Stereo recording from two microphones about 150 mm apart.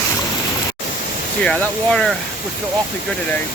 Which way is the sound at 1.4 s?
5° left (ahead or behind).